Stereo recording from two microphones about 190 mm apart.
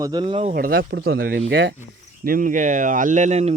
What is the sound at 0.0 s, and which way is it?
Speech, 25° right (ahead or behind).